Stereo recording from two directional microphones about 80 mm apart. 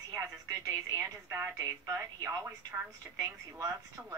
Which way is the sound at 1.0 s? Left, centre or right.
Right.